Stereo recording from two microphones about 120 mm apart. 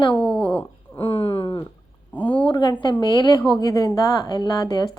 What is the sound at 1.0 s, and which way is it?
A woman's voice, 45° left (ahead or behind).